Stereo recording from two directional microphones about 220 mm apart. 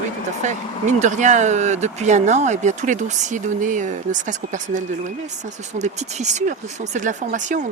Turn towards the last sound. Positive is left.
turn(degrees=-35)  # may be behind; listen again after turning